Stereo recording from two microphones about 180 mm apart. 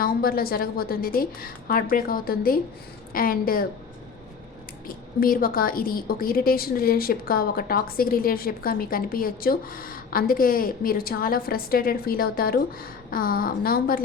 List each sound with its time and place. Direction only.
0.0 s a woman's voice: 55° left (ahead or behind)
5.2 s a woman's voice: 55° left (ahead or behind)